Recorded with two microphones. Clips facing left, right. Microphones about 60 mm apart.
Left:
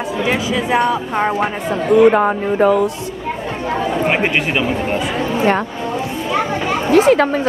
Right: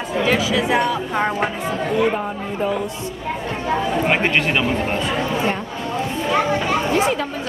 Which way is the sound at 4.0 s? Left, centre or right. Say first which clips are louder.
Left 2 dB; centre.